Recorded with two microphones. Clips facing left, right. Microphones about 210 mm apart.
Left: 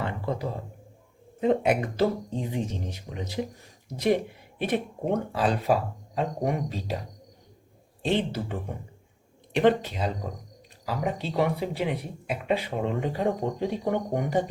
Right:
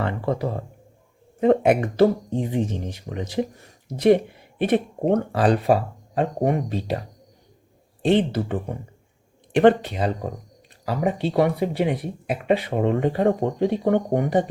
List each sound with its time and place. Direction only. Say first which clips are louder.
0.0 s a sound: right 6 dB; 70° right (ahead or behind)
1.4 s speech: right 6 dB; 60° right (ahead or behind)
8.0 s speech: right 7 dB; 55° right (ahead or behind)